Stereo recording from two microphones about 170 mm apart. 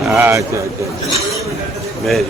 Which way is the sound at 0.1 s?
15° right (ahead or behind).